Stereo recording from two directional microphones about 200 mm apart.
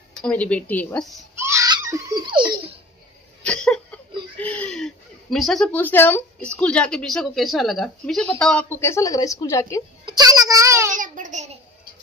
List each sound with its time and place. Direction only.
0.1 s speech: 5° left (ahead or behind)
1.3 s giggle: 15° right (ahead or behind)
3.4 s speech: 5° left (ahead or behind)
10.0 s child singing: 20° right (ahead or behind)
11.0 s babbling: 40° right (ahead or behind)